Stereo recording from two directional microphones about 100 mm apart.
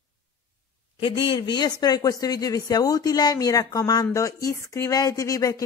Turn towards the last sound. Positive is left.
turn(degrees=35)  # may be behind; listen again after turning